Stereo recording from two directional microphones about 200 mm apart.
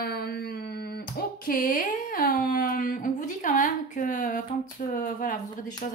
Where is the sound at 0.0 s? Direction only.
50° left (ahead or behind).